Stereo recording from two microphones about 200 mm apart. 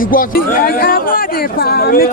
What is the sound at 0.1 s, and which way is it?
Speech, 45° left (ahead or behind).